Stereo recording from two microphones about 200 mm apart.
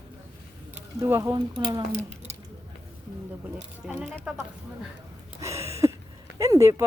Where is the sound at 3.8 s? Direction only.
Centre (ahead or behind).